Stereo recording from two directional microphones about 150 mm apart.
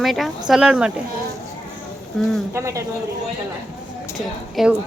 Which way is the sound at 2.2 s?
5° left (ahead or behind).